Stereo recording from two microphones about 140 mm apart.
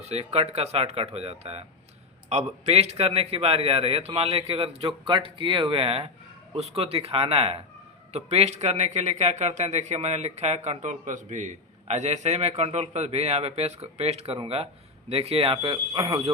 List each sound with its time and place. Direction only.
0.0 s speech: 50° right (ahead or behind); by 16.3 s 30° right (ahead or behind)